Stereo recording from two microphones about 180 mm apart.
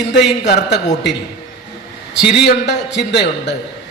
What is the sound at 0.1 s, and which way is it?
Speech, 70° left (ahead or behind).